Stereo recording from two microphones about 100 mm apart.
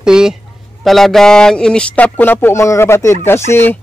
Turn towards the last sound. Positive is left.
turn(degrees=25)  # may be behind; listen again after turning